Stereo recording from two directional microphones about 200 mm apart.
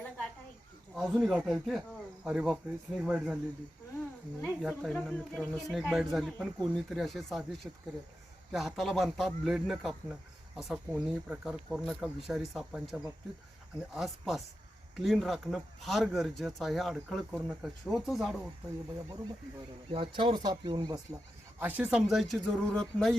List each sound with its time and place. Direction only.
0.9 s speech: centre (ahead or behind)
4.4 s speech: centre (ahead or behind)
18.9 s speech: 15° right (ahead or behind)
21.6 s speech: 5° right (ahead or behind)